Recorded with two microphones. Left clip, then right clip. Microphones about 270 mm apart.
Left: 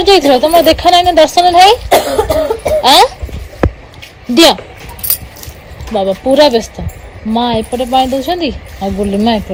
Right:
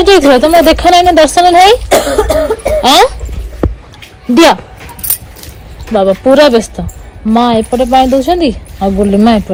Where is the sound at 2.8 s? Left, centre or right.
Right.